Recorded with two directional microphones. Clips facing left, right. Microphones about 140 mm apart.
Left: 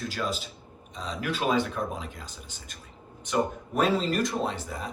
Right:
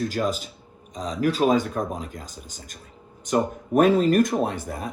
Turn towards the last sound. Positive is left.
turn(degrees=-50)  # may be behind; listen again after turning